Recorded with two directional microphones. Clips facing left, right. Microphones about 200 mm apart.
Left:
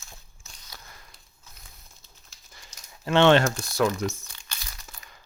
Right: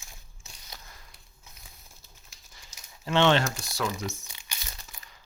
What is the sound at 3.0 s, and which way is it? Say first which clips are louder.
Speech: left 5 dB; 55° left (ahead or behind).